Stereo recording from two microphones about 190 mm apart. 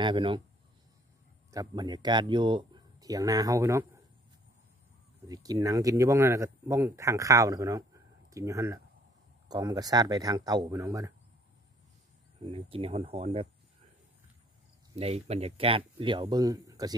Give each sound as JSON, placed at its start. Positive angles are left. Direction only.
{"t": 0.0, "sound": "speech", "side_deg": -25}
{"t": 1.5, "sound": "speech", "side_deg": -20}
{"t": 5.3, "sound": "speech", "side_deg": -20}
{"t": 12.4, "sound": "speech", "side_deg": -30}
{"t": 15.0, "sound": "speech", "side_deg": -35}